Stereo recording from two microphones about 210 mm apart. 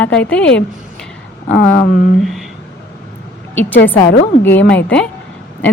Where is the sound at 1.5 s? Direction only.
50° left (ahead or behind).